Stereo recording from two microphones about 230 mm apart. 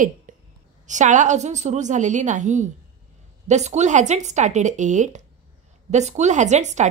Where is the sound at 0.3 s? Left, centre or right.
Right.